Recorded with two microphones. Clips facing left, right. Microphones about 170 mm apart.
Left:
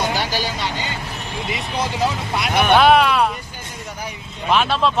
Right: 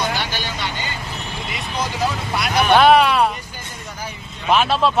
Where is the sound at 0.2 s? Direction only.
35° left (ahead or behind).